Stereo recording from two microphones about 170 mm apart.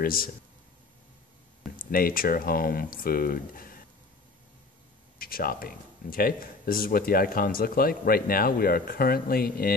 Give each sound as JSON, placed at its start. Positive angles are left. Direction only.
{"t": 0.0, "sound": "speech", "side_deg": 55}
{"t": 1.8, "sound": "speech", "side_deg": 60}
{"t": 5.2, "sound": "speech", "side_deg": 60}